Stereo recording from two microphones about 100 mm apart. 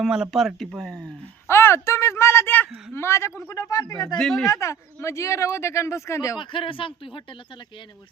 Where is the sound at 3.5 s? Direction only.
35° left (ahead or behind).